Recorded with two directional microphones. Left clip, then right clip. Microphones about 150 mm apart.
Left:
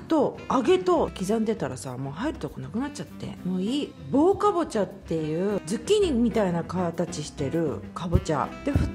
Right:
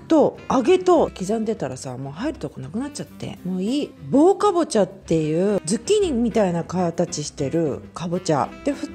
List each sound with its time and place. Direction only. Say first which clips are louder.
0.1 s a woman's voice: right 6 dB; 20° right (ahead or behind)
1.2 s a woman's voice: right 2 dB; 10° right (ahead or behind)